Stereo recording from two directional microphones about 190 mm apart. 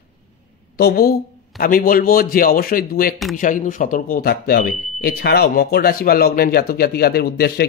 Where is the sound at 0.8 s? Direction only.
55° left (ahead or behind).